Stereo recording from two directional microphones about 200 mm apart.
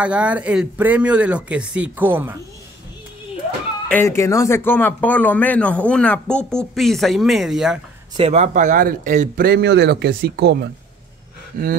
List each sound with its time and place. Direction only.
0.0 s speech: 5° right (ahead or behind)
3.9 s speech: 15° left (ahead or behind); by 7.8 s centre (ahead or behind)
8.2 s a man's voice: 35° right (ahead or behind); by 10.7 s 55° right (ahead or behind)